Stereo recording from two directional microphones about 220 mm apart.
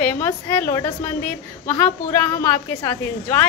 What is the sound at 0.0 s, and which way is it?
A woman's voice, 10° left (ahead or behind).